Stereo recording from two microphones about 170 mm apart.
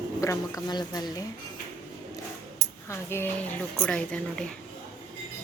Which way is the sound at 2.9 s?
15° left (ahead or behind).